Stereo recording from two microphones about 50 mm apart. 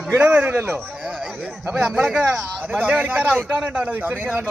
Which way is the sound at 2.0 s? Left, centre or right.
Right.